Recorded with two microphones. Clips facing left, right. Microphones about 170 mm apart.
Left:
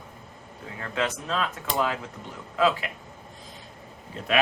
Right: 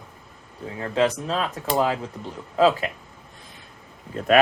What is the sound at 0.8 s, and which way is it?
Speech, 30° right (ahead or behind).